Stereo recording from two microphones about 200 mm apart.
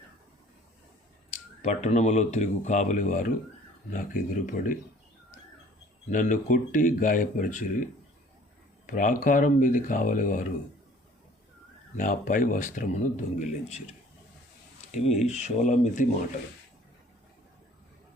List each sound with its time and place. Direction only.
1.3 s speech: 35° left (ahead or behind)
6.1 s speech: 40° left (ahead or behind)
8.9 s speech: 40° left (ahead or behind)
11.9 s speech: 40° left (ahead or behind)
14.9 s speech: 35° left (ahead or behind)